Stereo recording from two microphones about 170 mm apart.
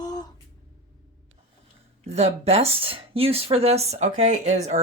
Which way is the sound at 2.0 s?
40° right (ahead or behind).